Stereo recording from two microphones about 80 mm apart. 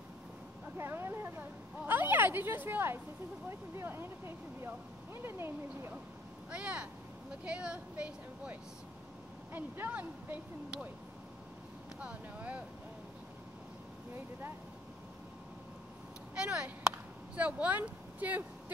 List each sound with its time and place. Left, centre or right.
0.7 s speech: right
6.5 s speech: centre
12.0 s speech: centre
16.3 s speech: centre